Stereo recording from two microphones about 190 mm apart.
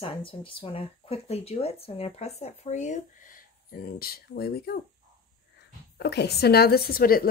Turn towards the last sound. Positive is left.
turn(degrees=50)  # may be behind; listen again after turning